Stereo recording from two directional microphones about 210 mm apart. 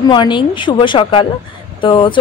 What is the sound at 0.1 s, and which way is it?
Speech, 20° left (ahead or behind).